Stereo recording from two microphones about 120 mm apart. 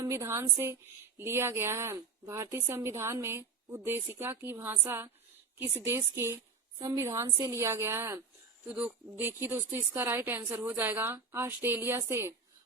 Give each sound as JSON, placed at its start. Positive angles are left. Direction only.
{"t": 0.0, "sound": "speech", "side_deg": -25}
{"t": 8.6, "sound": "speech", "side_deg": -10}